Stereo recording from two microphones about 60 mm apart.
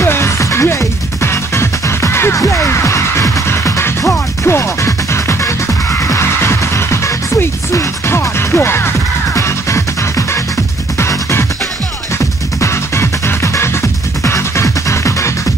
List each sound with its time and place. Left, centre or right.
0.0 s music: left
12.5 s music: left